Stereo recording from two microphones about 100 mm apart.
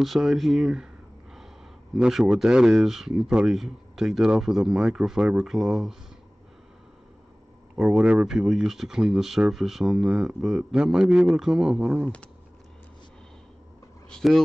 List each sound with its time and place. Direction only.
0.0 s speech: centre (ahead or behind)
2.0 s speech: 5° right (ahead or behind)
7.7 s speech: 10° right (ahead or behind)
14.1 s speech: centre (ahead or behind)